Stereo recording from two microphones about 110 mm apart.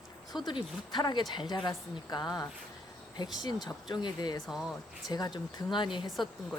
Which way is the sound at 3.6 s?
40° left (ahead or behind).